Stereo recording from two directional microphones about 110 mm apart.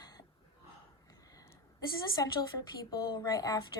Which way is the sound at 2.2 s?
30° left (ahead or behind).